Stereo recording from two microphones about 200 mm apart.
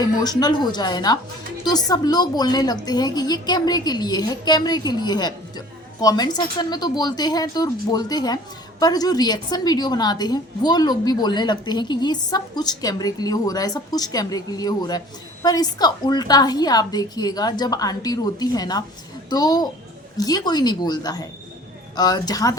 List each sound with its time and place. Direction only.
0.0 s a woman's voice: 20° left (ahead or behind)